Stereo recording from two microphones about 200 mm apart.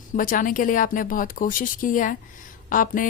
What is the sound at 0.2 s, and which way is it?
Speech, 45° left (ahead or behind).